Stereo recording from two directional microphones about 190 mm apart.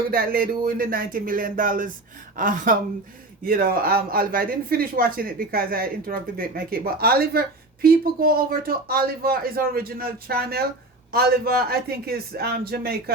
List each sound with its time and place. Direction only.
0.1 s a man's voice: 50° right (ahead or behind)